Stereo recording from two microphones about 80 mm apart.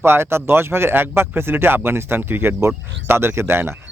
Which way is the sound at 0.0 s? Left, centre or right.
Right.